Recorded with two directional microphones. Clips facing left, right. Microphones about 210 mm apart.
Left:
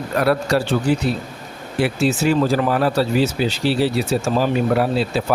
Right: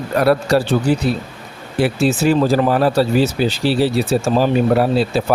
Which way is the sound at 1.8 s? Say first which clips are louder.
Right 3 dB; 35° right (ahead or behind).